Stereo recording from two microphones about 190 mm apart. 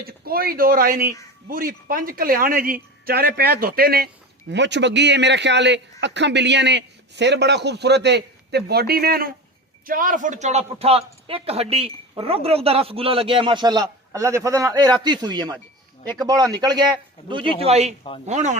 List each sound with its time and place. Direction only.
0.0 s a man's voice: 50° right (ahead or behind)